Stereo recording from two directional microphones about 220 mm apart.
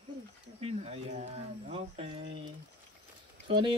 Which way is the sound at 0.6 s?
30° right (ahead or behind).